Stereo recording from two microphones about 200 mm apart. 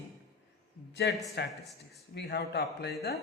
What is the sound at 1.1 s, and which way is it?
Speech, 60° left (ahead or behind).